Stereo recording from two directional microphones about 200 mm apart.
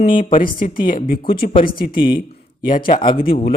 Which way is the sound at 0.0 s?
40° left (ahead or behind).